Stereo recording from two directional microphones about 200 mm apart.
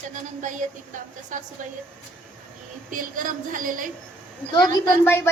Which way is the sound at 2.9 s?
40° right (ahead or behind).